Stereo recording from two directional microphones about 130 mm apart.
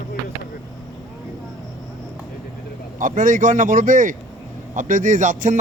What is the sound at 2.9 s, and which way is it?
Speech, 90° right.